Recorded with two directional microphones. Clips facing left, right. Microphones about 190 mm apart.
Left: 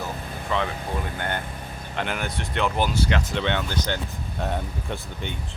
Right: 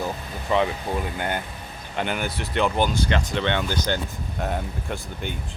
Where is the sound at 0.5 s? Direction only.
15° right (ahead or behind).